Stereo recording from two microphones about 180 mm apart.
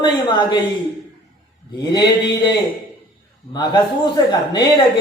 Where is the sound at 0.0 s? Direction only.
25° left (ahead or behind).